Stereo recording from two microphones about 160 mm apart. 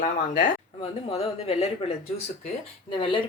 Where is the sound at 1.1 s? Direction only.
40° left (ahead or behind).